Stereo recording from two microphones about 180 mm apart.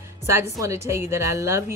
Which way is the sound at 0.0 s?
15° right (ahead or behind).